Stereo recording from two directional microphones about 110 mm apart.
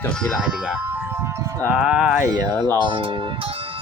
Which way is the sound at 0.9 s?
20° right (ahead or behind).